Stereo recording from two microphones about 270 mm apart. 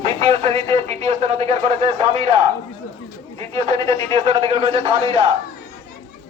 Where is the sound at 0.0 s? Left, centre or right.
Right.